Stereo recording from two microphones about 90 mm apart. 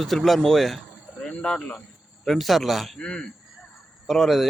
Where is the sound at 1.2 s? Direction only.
10° left (ahead or behind).